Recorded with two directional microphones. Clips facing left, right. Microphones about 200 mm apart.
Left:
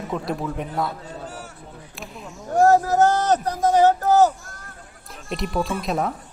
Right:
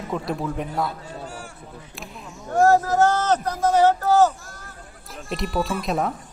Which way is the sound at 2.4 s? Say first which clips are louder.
Left 1 dB; 20° left (ahead or behind).